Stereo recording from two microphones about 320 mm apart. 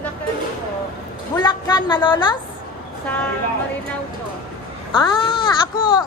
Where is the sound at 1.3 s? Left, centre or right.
Centre.